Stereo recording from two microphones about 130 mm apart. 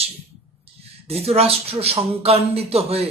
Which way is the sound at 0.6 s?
50° right (ahead or behind).